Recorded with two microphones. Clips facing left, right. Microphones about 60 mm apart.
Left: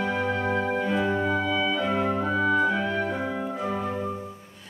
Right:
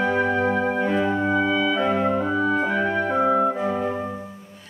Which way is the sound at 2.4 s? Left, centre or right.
Right.